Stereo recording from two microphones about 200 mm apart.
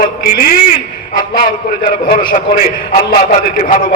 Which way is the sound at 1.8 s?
40° left (ahead or behind).